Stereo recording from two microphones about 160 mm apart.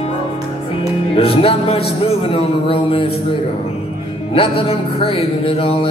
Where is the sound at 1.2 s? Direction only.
35° left (ahead or behind).